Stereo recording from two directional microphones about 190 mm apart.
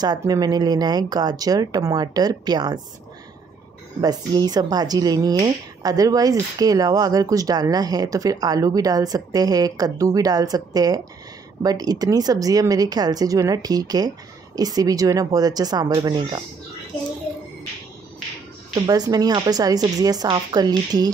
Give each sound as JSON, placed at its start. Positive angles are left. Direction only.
{"t": 0.0, "sound": "speech", "side_deg": -20}
{"t": 4.0, "sound": "speech", "side_deg": -20}
{"t": 18.9, "sound": "speech", "side_deg": -20}